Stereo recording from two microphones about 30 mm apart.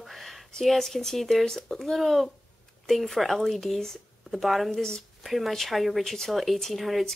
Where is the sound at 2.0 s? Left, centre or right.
Centre.